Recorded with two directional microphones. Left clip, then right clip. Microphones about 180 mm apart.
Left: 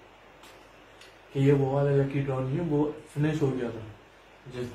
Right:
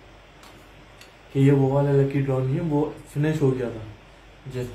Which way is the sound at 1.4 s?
45° right (ahead or behind).